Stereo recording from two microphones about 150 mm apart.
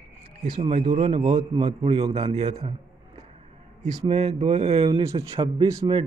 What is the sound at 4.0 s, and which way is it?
Speech, 45° right (ahead or behind).